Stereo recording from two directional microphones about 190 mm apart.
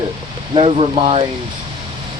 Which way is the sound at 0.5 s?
30° right (ahead or behind).